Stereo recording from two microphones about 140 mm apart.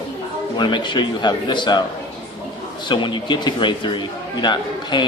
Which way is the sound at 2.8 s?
35° left (ahead or behind).